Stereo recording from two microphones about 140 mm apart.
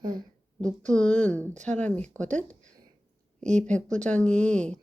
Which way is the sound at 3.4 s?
55° right (ahead or behind).